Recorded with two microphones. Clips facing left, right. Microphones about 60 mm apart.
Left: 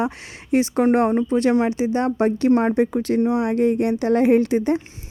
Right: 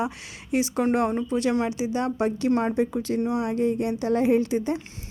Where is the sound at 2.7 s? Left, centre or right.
Left.